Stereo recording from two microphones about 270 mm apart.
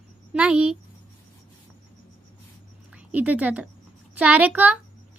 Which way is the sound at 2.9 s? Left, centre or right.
Centre.